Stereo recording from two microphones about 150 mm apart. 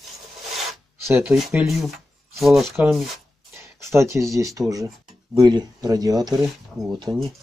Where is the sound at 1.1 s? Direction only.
5° right (ahead or behind).